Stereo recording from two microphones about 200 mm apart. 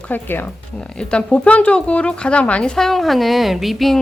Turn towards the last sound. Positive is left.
turn(degrees=0)  # may be behind; listen again after turning